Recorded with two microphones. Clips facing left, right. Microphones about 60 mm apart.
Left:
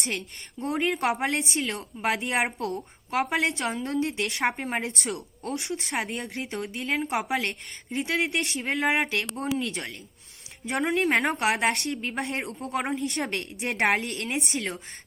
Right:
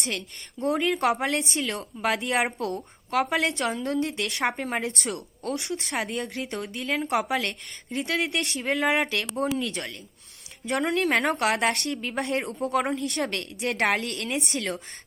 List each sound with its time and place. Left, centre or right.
1.2 s a woman's voice: centre
13.3 s a woman's voice: left
13.6 s speech: centre
14.5 s speech: centre